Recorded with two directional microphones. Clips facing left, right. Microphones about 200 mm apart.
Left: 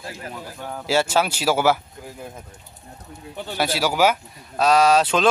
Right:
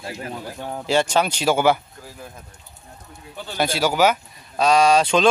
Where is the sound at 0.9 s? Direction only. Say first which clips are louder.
Right 1 dB; 5° left (ahead or behind).